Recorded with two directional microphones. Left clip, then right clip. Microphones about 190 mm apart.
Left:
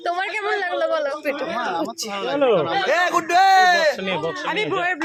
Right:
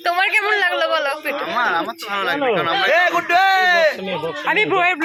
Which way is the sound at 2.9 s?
65° left (ahead or behind).